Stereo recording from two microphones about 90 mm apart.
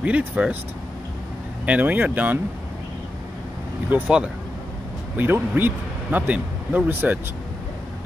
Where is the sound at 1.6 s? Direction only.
15° right (ahead or behind).